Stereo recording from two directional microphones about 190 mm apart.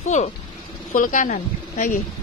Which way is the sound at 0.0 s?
40° left (ahead or behind).